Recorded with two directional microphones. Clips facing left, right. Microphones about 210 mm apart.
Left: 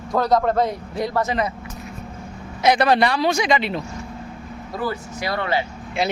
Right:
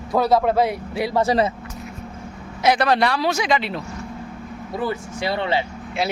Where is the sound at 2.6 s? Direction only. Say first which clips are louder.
Left 1 dB; centre (ahead or behind).